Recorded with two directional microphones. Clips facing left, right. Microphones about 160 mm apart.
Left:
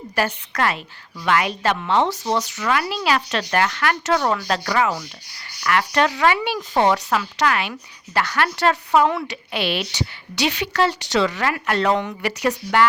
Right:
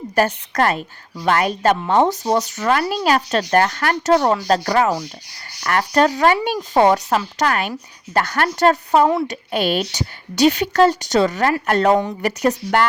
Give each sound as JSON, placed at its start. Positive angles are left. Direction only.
{"t": 0.2, "sound": "speech", "side_deg": -45}